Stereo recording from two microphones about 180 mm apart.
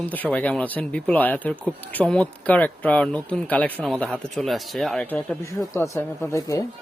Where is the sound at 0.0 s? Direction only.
10° left (ahead or behind).